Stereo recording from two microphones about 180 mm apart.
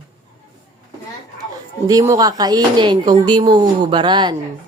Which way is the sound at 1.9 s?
20° right (ahead or behind).